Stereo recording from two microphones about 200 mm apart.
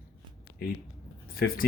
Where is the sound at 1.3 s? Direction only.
50° left (ahead or behind).